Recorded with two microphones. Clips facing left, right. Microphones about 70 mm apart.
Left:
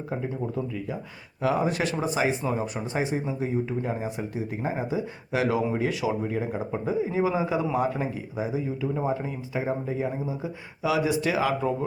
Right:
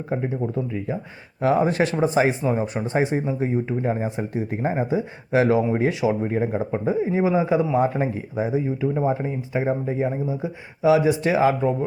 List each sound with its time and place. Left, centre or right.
0.1 s a man's voice: right
7.8 s speech: right